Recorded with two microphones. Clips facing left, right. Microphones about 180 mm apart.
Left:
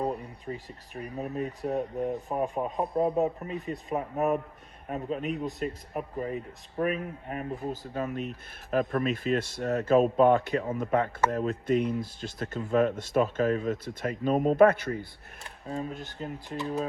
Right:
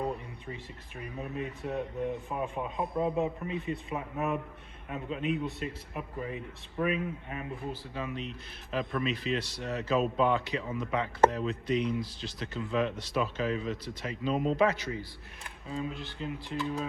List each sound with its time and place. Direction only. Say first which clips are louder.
0.0 s a man's voice: left 3 dB; 35° left (ahead or behind); by 15.0 s 55° left (ahead or behind)
15.6 s speech: left 2 dB; 40° left (ahead or behind)